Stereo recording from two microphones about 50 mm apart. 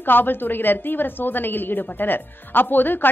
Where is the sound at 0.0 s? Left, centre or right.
Left.